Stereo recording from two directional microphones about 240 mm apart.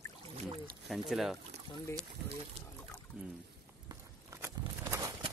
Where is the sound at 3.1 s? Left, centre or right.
Centre.